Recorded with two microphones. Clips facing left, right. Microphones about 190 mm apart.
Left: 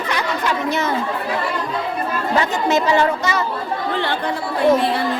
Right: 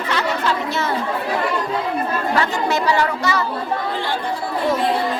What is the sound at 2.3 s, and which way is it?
Speech, 20° left (ahead or behind).